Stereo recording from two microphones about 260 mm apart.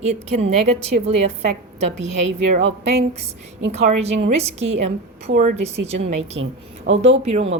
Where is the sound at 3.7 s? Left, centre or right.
Right.